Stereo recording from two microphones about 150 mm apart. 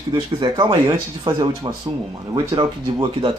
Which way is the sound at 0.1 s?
30° right (ahead or behind).